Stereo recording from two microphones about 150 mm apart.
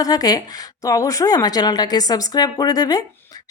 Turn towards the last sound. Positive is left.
turn(degrees=25)  # may be behind; listen again after turning